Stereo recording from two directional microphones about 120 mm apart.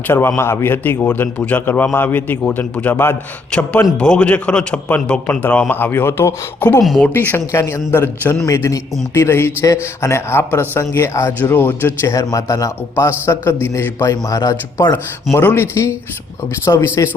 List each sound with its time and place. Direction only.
0.1 s a man's voice: 20° left (ahead or behind)